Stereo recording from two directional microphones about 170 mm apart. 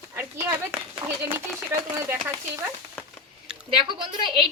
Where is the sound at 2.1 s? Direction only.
15° right (ahead or behind).